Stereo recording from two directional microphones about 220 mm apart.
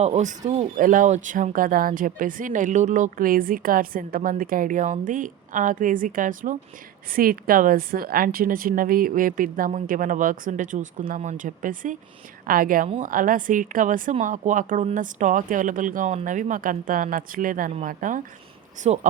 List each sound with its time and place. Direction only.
0.0 s speech: 30° right (ahead or behind)